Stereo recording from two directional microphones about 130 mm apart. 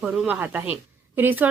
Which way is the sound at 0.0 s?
10° right (ahead or behind).